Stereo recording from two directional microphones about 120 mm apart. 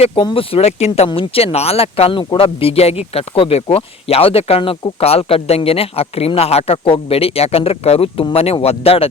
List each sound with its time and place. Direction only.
0.2 s speech: 45° left (ahead or behind)